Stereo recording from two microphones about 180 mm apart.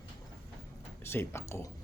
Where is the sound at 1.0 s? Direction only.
15° left (ahead or behind).